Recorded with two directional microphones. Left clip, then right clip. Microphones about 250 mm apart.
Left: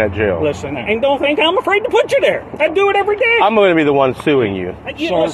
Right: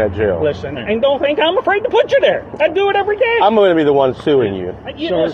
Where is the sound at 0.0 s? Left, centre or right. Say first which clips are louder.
Even; left.